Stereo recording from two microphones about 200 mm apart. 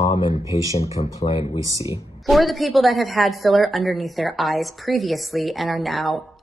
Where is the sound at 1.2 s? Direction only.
30° left (ahead or behind).